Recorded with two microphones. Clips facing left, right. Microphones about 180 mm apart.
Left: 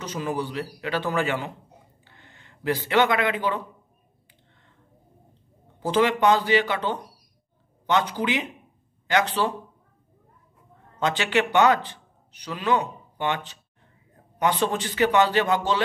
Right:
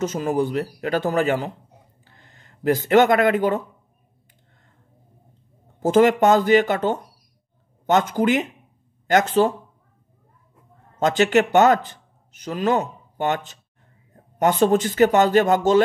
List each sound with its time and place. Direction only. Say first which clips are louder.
0.0 s speech: right 7 dB; 45° right (ahead or behind)
5.8 s speech: right 6 dB; 45° right (ahead or behind)
11.0 s a man's voice: right 6 dB; 45° right (ahead or behind)